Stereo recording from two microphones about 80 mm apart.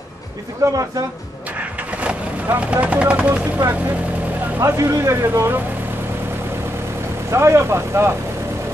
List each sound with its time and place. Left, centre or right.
0.6 s speech: right
2.0 s speech: centre
4.6 s speech: right
7.2 s speech: right